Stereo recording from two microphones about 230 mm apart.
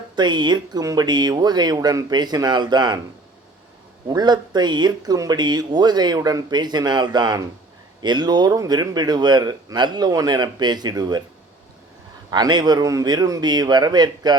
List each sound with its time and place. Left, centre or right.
0.2 s speech: centre
4.1 s speech: centre
12.3 s speech: centre